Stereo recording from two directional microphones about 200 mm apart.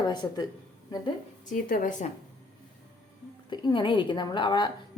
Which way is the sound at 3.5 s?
25° left (ahead or behind).